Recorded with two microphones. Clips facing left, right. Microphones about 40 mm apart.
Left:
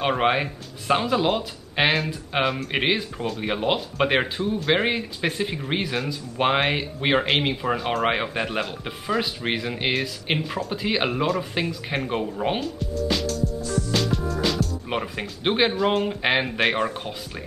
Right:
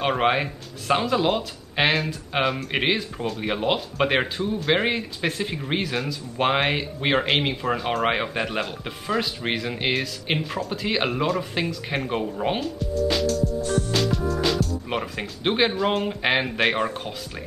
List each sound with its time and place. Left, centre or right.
0.0 s speech: centre
13.7 s music: right
13.9 s speech: centre